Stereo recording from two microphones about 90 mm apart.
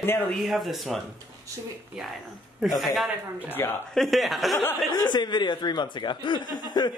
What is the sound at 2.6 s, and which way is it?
A man's voice, centre (ahead or behind).